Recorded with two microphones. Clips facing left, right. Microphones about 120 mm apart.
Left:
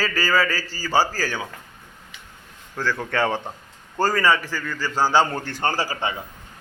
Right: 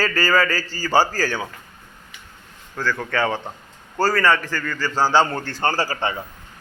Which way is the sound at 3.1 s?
25° left (ahead or behind).